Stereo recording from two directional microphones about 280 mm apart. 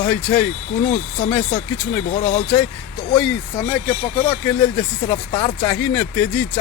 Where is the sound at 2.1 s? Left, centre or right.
Left.